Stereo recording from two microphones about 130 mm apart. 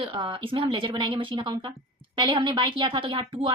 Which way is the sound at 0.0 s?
40° right (ahead or behind).